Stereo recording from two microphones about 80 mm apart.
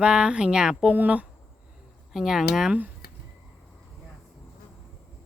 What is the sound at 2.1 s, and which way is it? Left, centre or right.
Speech, centre.